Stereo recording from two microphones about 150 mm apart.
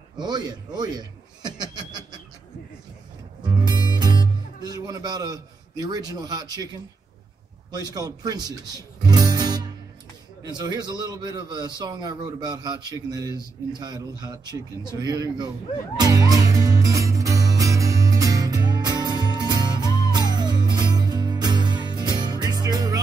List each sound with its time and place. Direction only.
0.2 s chuckle: 30° right (ahead or behind)
3.4 s music: 30° right (ahead or behind)
7.7 s a man's voice: 25° right (ahead or behind)
16.0 s music: 25° right (ahead or behind)